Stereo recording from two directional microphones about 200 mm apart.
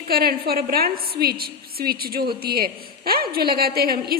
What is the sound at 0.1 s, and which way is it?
A woman's voice, 50° right (ahead or behind).